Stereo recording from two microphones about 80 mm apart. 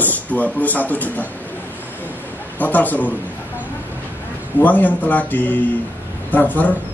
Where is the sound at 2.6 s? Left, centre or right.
Left.